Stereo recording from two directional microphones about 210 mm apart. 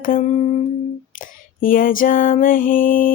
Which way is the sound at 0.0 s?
40° left (ahead or behind).